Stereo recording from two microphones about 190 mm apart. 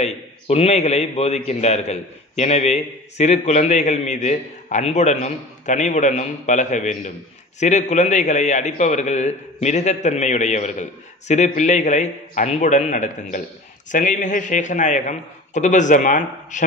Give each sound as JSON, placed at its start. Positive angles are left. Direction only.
{"t": 0.0, "sound": "a man's voice", "side_deg": 35}